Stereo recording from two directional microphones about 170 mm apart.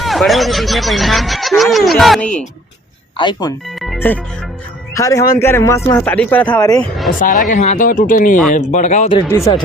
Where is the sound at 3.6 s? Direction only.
Centre (ahead or behind).